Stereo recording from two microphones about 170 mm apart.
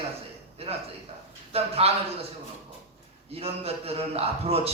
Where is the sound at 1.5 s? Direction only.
35° right (ahead or behind).